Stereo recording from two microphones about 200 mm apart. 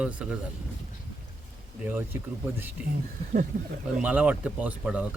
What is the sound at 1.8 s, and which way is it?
Speech, 10° right (ahead or behind).